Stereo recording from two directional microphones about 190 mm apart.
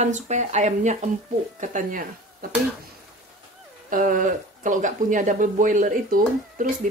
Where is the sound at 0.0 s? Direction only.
40° right (ahead or behind).